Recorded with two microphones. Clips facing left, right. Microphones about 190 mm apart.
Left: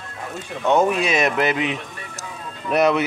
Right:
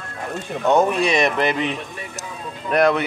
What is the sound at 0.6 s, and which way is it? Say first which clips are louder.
Speech: right 1 dB; centre (ahead or behind).